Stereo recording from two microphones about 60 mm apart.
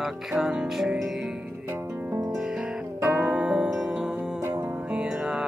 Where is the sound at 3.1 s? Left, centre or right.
Centre.